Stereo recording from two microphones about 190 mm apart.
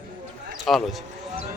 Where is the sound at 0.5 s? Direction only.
Centre (ahead or behind).